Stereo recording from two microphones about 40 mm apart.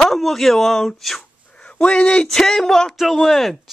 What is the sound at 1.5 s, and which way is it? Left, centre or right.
Dog, left.